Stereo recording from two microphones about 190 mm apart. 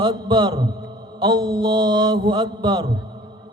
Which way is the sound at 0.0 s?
25° right (ahead or behind).